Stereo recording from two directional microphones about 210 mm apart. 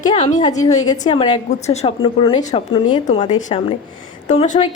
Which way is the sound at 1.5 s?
30° left (ahead or behind).